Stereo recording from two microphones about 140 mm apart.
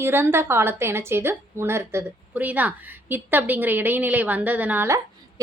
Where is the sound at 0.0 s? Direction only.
15° right (ahead or behind).